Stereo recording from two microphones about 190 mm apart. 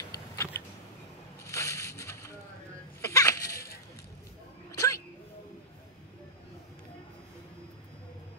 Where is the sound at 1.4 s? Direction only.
15° left (ahead or behind).